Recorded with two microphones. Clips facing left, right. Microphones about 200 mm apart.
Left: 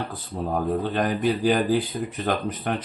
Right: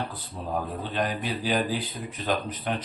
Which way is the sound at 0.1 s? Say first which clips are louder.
Left 4 dB; 50° left (ahead or behind).